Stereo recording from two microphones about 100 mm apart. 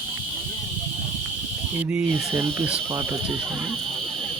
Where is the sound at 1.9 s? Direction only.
20° right (ahead or behind).